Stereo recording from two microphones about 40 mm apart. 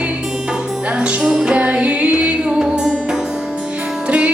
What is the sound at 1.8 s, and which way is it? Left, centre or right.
Music, right.